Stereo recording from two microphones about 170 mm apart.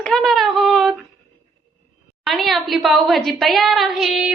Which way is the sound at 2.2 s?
Centre (ahead or behind).